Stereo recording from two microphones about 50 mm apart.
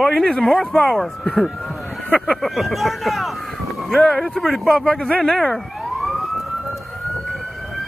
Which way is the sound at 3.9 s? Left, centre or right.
Centre.